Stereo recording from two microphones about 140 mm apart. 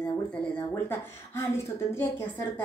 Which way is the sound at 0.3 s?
15° left (ahead or behind).